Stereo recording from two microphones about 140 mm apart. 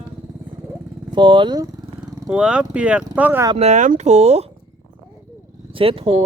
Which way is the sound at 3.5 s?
55° right (ahead or behind).